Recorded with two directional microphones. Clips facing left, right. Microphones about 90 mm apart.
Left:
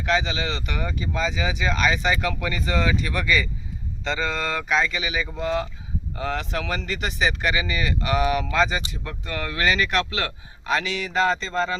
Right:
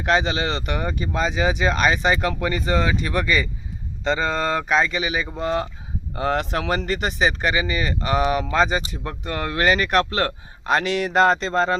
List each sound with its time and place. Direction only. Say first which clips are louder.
0.0 s speech: right 3 dB; 45° right (ahead or behind)